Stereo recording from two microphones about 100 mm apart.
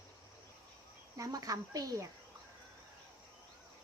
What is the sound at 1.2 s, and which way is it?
Speech, 35° right (ahead or behind).